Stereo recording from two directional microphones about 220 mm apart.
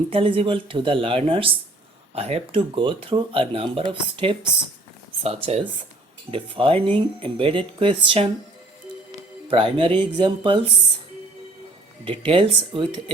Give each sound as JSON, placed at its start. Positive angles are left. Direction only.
{"t": 0.1, "sound": "speech", "side_deg": -25}
{"t": 9.5, "sound": "speech", "side_deg": -25}
{"t": 12.2, "sound": "speech", "side_deg": -25}